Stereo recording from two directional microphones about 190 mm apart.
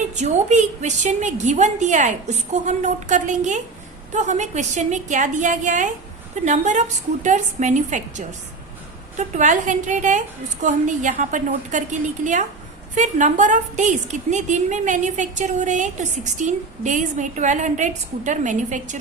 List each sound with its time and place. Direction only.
0.2 s a woman's voice: 35° right (ahead or behind)